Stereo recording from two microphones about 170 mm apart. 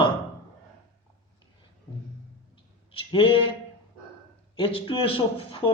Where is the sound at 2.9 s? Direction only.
30° left (ahead or behind).